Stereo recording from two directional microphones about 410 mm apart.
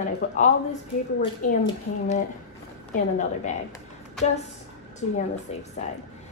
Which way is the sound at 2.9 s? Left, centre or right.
Centre.